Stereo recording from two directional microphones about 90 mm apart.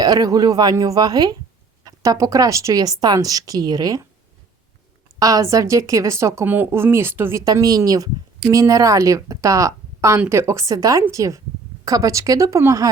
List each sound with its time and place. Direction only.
0.0 s speech: 45° right (ahead or behind)
5.2 s speech: 40° right (ahead or behind)
7.4 s speech: 45° right (ahead or behind)